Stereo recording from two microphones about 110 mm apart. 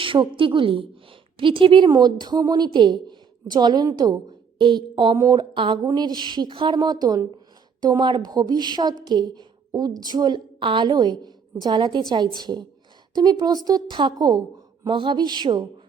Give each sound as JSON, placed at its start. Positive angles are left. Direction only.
{"t": 0.0, "sound": "a woman's voice", "side_deg": -50}
{"t": 1.9, "sound": "a woman's voice", "side_deg": -40}
{"t": 5.1, "sound": "a woman's voice", "side_deg": -35}